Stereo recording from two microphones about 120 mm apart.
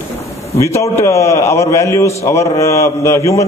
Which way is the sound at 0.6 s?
25° left (ahead or behind).